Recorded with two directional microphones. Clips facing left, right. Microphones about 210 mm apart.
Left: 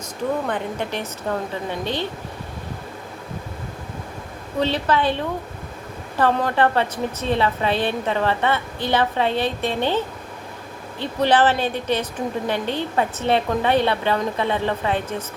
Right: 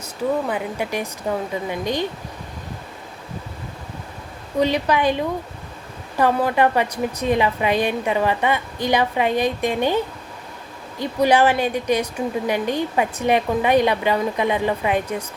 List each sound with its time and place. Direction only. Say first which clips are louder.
0.4 s a woman's voice: right 1 dB; 10° right (ahead or behind)
4.6 s a woman's voice: right 2 dB; 15° right (ahead or behind)
11.0 s a woman's voice: right 1 dB; 10° right (ahead or behind)